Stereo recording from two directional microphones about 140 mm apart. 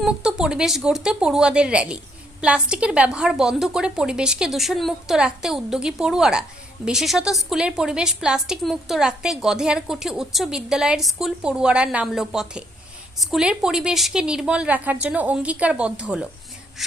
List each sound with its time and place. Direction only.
0.0 s a woman's voice: 5° right (ahead or behind)